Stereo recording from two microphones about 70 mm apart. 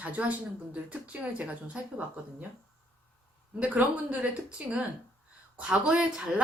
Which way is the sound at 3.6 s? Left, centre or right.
Right.